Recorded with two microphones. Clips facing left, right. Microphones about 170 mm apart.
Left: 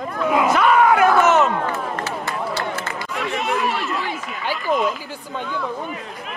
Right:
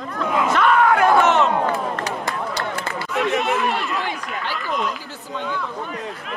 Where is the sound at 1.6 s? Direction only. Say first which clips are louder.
Right 2 dB; 15° right (ahead or behind).